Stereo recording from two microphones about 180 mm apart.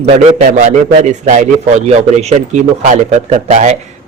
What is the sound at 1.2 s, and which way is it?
A man's voice, 40° right (ahead or behind).